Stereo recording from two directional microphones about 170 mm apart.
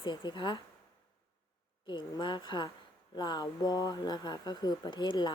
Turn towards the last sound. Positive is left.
turn(degrees=25)  # may be behind; listen again after turning